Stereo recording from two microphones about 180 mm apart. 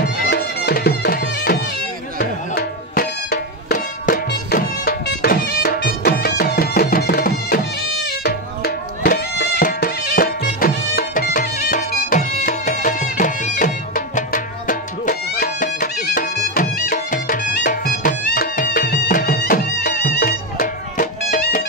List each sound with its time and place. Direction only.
0.0 s music: 65° left (ahead or behind); by 7.6 s 50° left (ahead or behind)
8.2 s music: 60° left (ahead or behind); by 21.6 s 45° left (ahead or behind)